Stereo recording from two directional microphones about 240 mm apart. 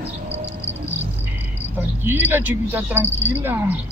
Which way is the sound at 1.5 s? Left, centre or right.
Centre.